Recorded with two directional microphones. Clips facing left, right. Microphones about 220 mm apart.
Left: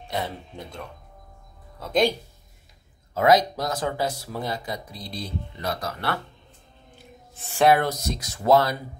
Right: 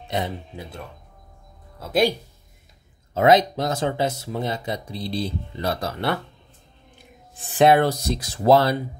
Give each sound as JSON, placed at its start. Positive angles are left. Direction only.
{"t": 0.6, "sound": "speech", "side_deg": -5}
{"t": 3.2, "sound": "speech", "side_deg": -25}
{"t": 7.3, "sound": "speech", "side_deg": -20}